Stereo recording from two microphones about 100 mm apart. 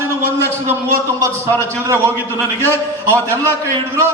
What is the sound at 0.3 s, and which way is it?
Speech, 25° right (ahead or behind).